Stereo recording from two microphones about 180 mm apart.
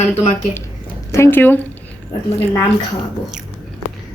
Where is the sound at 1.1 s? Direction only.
15° left (ahead or behind).